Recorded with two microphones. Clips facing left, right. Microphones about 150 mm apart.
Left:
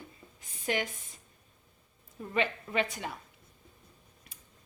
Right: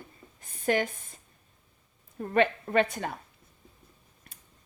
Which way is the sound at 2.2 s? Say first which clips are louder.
Right 7 dB; 50° right (ahead or behind).